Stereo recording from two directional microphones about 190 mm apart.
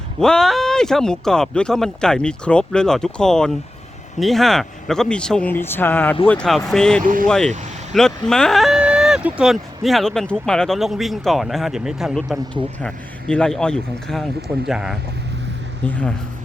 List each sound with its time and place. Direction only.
0.2 s speech: 5° left (ahead or behind)
7.0 s speech: 45° right (ahead or behind)
7.3 s speech: 5° left (ahead or behind)